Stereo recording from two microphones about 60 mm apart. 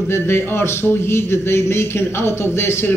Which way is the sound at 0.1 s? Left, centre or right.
Left.